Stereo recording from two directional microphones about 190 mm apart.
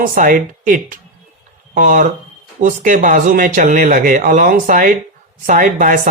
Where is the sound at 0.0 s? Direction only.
45° right (ahead or behind).